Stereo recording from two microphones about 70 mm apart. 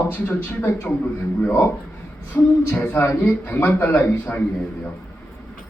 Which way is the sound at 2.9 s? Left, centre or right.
Left.